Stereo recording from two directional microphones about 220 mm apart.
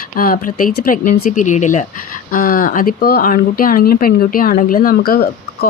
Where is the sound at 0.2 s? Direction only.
40° left (ahead or behind).